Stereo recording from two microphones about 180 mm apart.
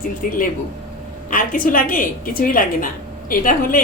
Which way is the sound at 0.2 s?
50° left (ahead or behind).